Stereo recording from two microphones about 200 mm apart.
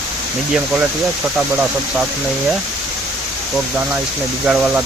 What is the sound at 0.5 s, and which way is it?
Speech, 5° right (ahead or behind).